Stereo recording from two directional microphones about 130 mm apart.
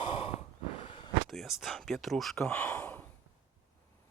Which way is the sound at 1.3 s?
Centre (ahead or behind).